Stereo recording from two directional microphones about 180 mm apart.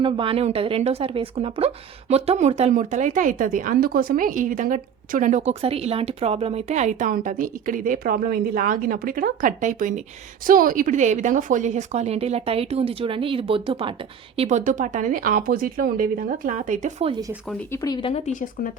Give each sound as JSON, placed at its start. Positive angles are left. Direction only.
{"t": 0.0, "sound": "speech", "side_deg": -30}
{"t": 17.1, "sound": "speech", "side_deg": -20}
{"t": 17.8, "sound": "speech", "side_deg": 25}
{"t": 18.3, "sound": "speech", "side_deg": 45}